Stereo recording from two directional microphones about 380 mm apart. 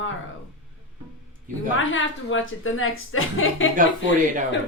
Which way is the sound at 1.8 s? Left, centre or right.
Left.